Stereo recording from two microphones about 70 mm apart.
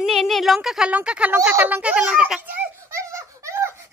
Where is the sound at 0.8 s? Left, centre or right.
Centre.